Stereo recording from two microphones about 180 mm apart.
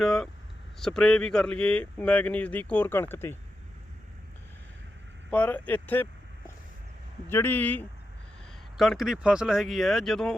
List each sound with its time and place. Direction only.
0.0 s speech: centre (ahead or behind)
5.3 s speech: 10° left (ahead or behind)
7.3 s speech: 10° left (ahead or behind)